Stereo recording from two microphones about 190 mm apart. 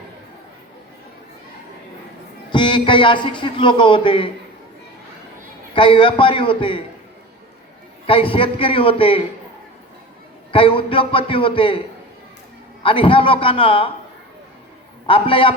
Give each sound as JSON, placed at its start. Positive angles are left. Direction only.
{"t": 2.5, "sound": "a man's voice", "side_deg": 25}
{"t": 5.7, "sound": "a man's voice", "side_deg": 25}
{"t": 8.0, "sound": "a man's voice", "side_deg": 30}
{"t": 10.5, "sound": "a man's voice", "side_deg": 25}
{"t": 12.8, "sound": "a man's voice", "side_deg": 25}
{"t": 15.0, "sound": "a man's voice", "side_deg": 25}